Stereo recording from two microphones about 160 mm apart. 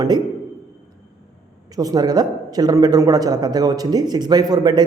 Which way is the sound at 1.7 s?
25° right (ahead or behind).